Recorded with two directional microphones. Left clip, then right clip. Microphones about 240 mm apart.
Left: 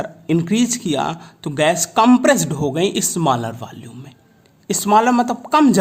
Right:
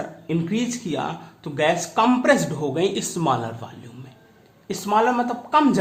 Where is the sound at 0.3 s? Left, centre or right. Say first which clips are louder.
Left 7 dB; left.